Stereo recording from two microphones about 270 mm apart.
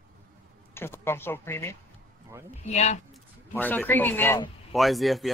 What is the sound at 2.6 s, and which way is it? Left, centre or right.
Speech, left.